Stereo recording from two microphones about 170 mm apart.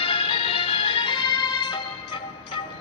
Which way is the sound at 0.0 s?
35° left (ahead or behind).